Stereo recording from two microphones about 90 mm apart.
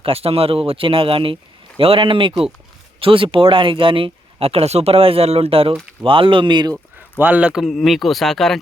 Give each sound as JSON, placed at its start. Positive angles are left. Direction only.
{"t": 0.0, "sound": "speech", "side_deg": -90}
{"t": 3.0, "sound": "speech", "side_deg": -85}
{"t": 6.0, "sound": "speech", "side_deg": -70}
{"t": 7.2, "sound": "speech", "side_deg": -20}
{"t": 7.5, "sound": "speech", "side_deg": 0}